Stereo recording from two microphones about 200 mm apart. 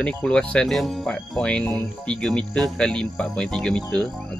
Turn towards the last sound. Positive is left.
turn(degrees=5)  # may be behind; listen again after turning